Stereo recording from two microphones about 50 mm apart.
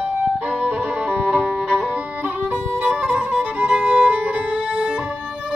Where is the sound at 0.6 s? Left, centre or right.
Right.